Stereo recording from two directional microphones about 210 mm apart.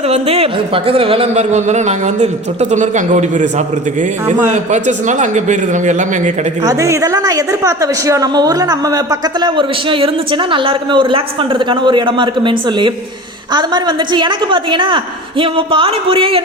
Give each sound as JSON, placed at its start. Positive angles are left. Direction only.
{"t": 0.1, "sound": "speech", "side_deg": -30}
{"t": 6.6, "sound": "a woman's voice", "side_deg": -15}